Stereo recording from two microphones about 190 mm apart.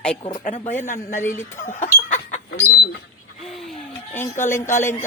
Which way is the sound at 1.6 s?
40° left (ahead or behind).